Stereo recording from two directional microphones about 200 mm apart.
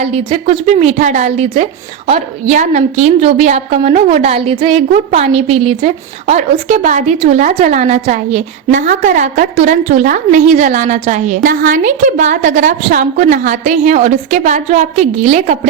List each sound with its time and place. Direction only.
0.0 s a woman's voice: 30° right (ahead or behind)